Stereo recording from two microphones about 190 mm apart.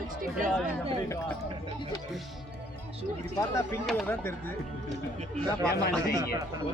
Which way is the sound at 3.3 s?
15° left (ahead or behind).